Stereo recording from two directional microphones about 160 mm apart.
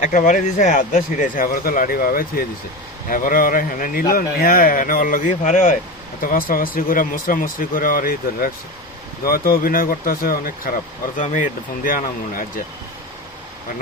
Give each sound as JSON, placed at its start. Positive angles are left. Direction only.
{"t": 0.0, "sound": "speech", "side_deg": 55}
{"t": 11.2, "sound": "speech", "side_deg": 55}